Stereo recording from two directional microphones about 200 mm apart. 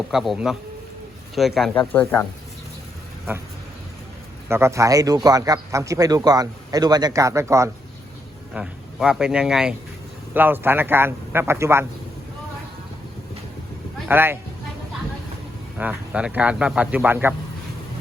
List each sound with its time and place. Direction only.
0.1 s speech: centre (ahead or behind)
4.4 s a man's voice: 15° right (ahead or behind)
14.1 s a man's voice: 10° right (ahead or behind)
15.8 s a man's voice: 5° right (ahead or behind)